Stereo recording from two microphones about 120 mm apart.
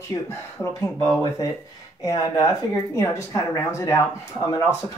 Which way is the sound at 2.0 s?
30° left (ahead or behind).